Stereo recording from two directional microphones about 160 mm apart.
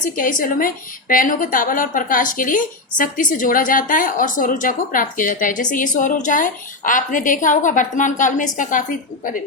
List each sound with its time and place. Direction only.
0.2 s a woman's voice: 55° left (ahead or behind)